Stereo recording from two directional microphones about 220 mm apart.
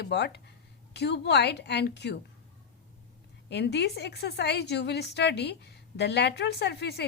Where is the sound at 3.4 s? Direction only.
50° left (ahead or behind).